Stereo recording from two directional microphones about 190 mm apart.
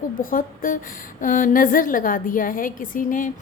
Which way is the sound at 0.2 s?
45° left (ahead or behind).